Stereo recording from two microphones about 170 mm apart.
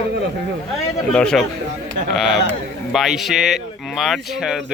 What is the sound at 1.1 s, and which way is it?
Speech, 5° left (ahead or behind).